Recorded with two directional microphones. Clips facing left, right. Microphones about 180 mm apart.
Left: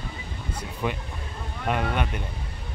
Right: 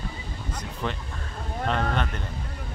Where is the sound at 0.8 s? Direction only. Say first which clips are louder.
Left 3 dB; 10° left (ahead or behind).